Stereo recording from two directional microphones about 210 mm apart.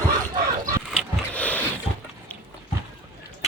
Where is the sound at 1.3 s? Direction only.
5° left (ahead or behind).